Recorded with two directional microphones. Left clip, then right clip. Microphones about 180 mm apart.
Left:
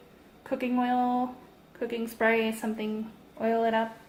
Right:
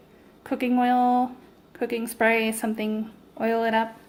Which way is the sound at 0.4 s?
50° right (ahead or behind).